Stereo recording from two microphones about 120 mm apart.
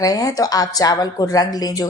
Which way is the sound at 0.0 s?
30° left (ahead or behind).